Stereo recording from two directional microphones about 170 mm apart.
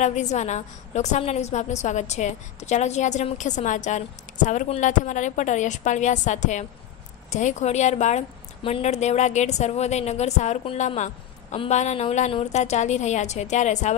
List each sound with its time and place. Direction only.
0.0 s a woman's voice: 45° left (ahead or behind)